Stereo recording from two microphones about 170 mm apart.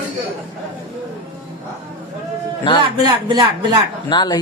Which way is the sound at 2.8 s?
25° right (ahead or behind).